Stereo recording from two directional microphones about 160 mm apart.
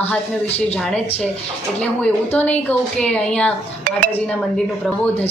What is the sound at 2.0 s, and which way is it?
A woman's voice, 10° left (ahead or behind).